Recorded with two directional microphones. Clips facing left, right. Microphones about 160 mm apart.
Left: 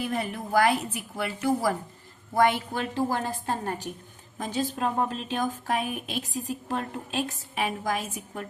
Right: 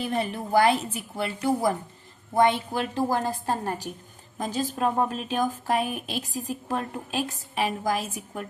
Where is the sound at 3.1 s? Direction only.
40° right (ahead or behind).